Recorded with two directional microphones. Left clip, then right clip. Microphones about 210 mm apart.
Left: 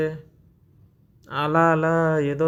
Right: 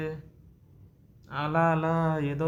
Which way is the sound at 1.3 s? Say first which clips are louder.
Left 7 dB; 40° left (ahead or behind).